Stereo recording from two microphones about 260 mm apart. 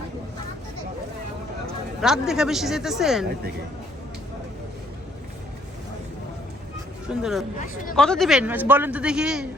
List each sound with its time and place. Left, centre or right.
2.0 s a man's voice: centre
7.1 s a man's voice: centre